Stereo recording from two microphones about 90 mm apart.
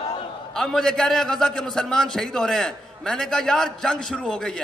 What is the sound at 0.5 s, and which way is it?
A man's voice, 5° left (ahead or behind).